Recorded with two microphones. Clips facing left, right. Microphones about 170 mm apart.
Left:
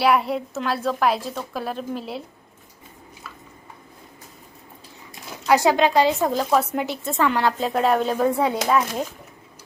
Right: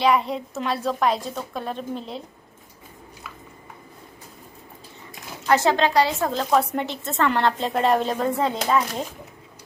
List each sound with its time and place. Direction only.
0.0 s a woman's voice: 5° left (ahead or behind)
5.5 s a woman's voice: 15° left (ahead or behind)